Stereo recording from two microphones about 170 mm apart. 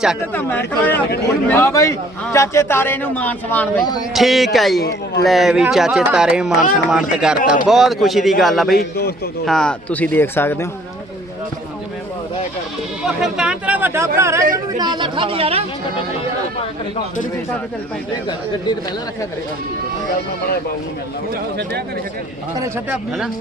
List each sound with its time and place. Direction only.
1.5 s a man's voice: 15° left (ahead or behind)
4.1 s speech: centre (ahead or behind)
4.8 s speech: 80° left
5.2 s speech: centre (ahead or behind)
8.7 s a man's voice: 65° left (ahead or behind)
9.5 s a man's voice: 5° left (ahead or behind)
13.0 s chatter: 5° right (ahead or behind)
14.2 s speech: 15° right (ahead or behind); by 15.6 s 35° right (ahead or behind)
22.9 s speech: 5° right (ahead or behind)